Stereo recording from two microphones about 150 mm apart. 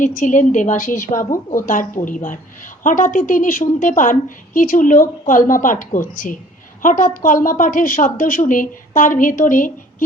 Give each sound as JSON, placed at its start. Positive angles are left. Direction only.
{"t": 0.0, "sound": "a woman's voice", "side_deg": 60}
{"t": 1.0, "sound": "a woman's voice", "side_deg": 20}
{"t": 1.6, "sound": "a woman's voice", "side_deg": 65}